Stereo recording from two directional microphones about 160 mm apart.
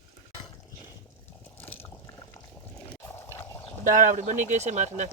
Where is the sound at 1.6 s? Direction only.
15° left (ahead or behind).